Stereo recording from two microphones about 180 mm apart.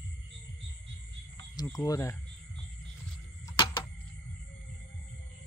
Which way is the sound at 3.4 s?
25° left (ahead or behind).